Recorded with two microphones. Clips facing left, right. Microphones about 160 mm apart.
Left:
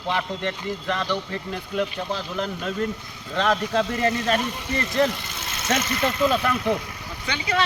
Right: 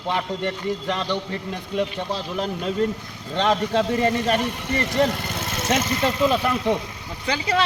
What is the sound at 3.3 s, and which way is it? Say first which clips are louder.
Speech: right 2 dB; 25° right (ahead or behind).